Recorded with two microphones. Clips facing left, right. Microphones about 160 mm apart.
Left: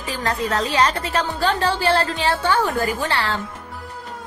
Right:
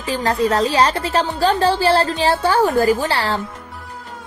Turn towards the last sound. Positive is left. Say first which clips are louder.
# right 5 dB
turn(degrees=-35)  # may be behind; listen again after turning